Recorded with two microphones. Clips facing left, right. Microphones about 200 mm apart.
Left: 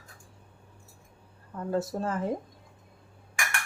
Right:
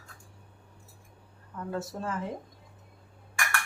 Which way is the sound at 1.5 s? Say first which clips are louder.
Left 5 dB; 35° left (ahead or behind).